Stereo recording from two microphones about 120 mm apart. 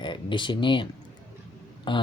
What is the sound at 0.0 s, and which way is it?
Speech, 40° left (ahead or behind).